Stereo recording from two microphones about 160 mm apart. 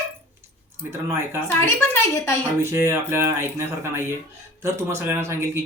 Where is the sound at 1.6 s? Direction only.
15° left (ahead or behind).